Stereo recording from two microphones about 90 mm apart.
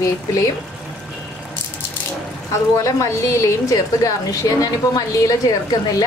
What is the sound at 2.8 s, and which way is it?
A woman's voice, 35° left (ahead or behind).